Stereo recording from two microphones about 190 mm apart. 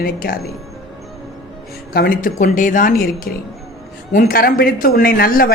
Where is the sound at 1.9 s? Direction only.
50° left (ahead or behind).